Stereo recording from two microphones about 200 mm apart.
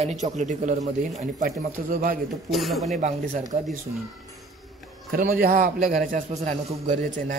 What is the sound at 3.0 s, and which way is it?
Speech, 35° right (ahead or behind).